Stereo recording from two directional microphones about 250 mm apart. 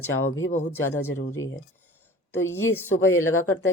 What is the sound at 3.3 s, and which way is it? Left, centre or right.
Speech, left.